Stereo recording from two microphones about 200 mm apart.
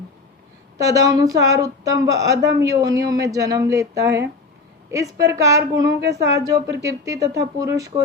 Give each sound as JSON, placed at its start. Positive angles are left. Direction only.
{"t": 0.8, "sound": "speech", "side_deg": -15}
{"t": 6.0, "sound": "speech", "side_deg": -55}
{"t": 6.2, "sound": "speech", "side_deg": -15}